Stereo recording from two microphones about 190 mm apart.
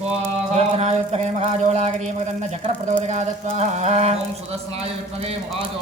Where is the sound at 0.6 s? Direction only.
35° right (ahead or behind).